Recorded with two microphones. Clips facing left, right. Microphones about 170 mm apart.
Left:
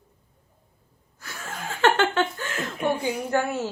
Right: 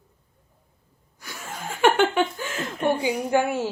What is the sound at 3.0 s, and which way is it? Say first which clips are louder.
Speech: right 3 dB; 10° right (ahead or behind).